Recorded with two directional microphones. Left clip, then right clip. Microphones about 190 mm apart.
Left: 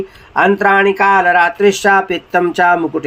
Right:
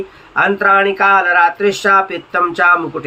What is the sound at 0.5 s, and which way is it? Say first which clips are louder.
Speech: left 1 dB; 55° left (ahead or behind).